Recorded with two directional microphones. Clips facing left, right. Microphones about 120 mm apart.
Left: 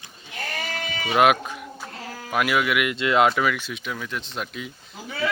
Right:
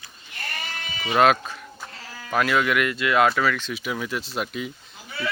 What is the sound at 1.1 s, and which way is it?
Speech, 15° left (ahead or behind).